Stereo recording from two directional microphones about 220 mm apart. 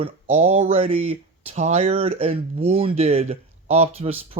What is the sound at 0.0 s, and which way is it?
Speech, 30° right (ahead or behind).